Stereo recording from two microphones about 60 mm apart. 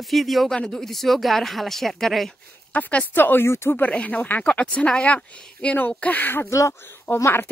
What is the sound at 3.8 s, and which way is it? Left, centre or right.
Speech, left.